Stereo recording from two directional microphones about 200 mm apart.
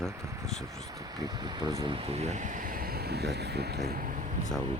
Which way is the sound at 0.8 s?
15° right (ahead or behind).